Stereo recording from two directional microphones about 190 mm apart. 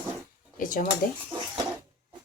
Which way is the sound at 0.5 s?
45° left (ahead or behind).